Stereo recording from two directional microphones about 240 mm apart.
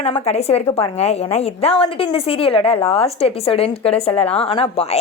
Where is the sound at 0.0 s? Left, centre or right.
Left.